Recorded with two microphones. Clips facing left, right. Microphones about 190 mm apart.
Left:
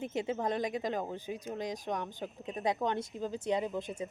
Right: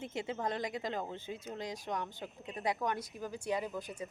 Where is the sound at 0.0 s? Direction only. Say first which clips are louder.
Left 4 dB; 20° left (ahead or behind).